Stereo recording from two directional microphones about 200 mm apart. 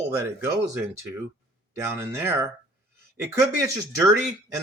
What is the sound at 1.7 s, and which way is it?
Speech, 10° right (ahead or behind).